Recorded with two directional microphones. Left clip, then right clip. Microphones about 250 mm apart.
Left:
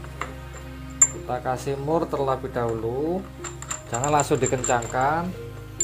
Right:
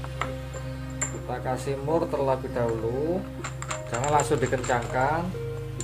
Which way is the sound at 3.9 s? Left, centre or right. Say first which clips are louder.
Left 2 dB; centre.